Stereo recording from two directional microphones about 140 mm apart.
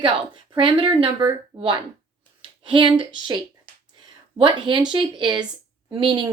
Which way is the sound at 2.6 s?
35° right (ahead or behind).